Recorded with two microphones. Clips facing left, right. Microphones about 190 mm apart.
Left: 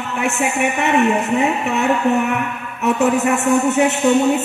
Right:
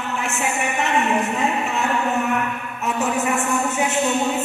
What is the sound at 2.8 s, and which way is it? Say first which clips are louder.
Speech: left 7 dB; 65° left (ahead or behind).